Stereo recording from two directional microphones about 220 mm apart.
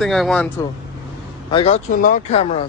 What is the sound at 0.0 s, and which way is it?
Speech, centre (ahead or behind).